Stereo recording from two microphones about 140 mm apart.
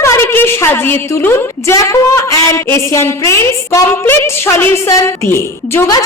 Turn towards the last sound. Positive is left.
turn(degrees=20)  # may be behind; listen again after turning